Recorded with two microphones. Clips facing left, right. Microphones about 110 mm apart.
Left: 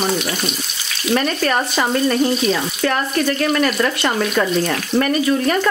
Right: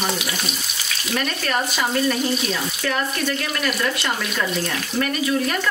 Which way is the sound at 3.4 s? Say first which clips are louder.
Left 7 dB; 50° left (ahead or behind).